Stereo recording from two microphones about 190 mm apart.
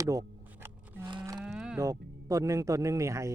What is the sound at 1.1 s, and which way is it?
Cattle, 25° right (ahead or behind).